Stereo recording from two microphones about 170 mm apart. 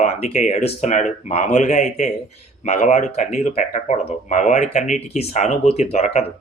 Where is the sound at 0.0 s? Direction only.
45° left (ahead or behind).